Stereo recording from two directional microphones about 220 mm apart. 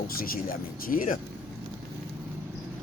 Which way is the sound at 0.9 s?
40° left (ahead or behind).